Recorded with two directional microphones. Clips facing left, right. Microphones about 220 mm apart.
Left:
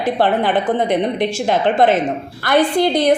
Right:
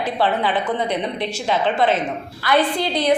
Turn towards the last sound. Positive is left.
turn(degrees=45)  # may be behind; listen again after turning